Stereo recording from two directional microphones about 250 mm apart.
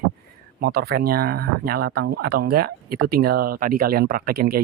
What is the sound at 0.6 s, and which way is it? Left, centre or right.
Speech, right.